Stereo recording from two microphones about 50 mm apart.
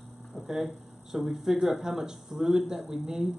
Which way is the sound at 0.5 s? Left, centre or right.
Centre.